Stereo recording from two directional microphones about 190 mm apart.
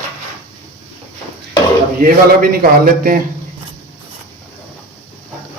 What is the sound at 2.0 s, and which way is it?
A man's voice, 50° right (ahead or behind).